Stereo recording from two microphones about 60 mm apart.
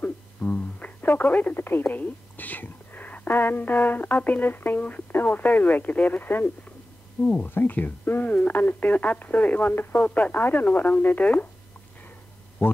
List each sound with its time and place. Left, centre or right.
0.0 s a sound: left
1.0 s speech: left
12.6 s speech: left